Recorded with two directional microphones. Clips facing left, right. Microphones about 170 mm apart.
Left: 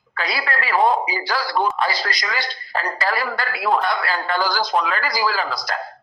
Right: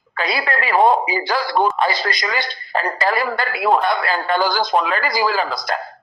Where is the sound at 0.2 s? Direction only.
20° right (ahead or behind).